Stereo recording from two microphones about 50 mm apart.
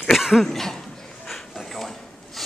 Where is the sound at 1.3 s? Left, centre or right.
Centre.